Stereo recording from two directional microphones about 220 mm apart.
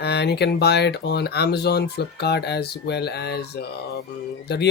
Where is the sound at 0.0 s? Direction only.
50° left (ahead or behind).